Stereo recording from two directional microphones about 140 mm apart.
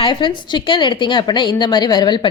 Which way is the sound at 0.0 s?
35° left (ahead or behind).